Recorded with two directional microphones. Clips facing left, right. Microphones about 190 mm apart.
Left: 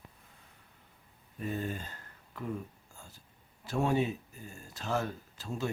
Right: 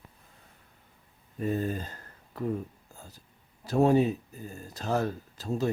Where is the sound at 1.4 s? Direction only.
40° right (ahead or behind).